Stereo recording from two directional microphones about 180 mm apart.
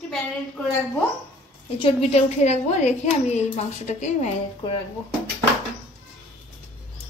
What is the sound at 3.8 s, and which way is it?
Speech, 40° left (ahead or behind).